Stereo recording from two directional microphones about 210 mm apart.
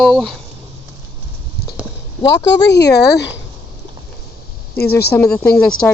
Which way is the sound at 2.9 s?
55° left (ahead or behind).